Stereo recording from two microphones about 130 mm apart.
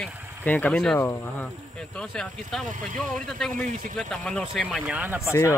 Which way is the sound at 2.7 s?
90° right.